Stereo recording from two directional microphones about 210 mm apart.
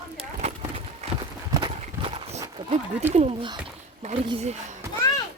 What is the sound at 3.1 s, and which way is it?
Speech, 30° right (ahead or behind).